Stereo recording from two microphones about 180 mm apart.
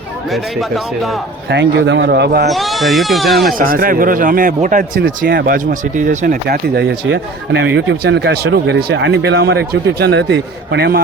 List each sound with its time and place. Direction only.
0.3 s speech: centre (ahead or behind)
1.5 s speech: 80° right; by 2.5 s 65° right (ahead or behind)
2.5 s speech: centre (ahead or behind)
3.6 s speech: 50° right (ahead or behind)